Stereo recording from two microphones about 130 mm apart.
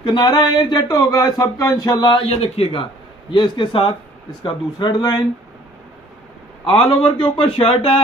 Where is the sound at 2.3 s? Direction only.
50° left (ahead or behind); by 5.2 s 35° left (ahead or behind).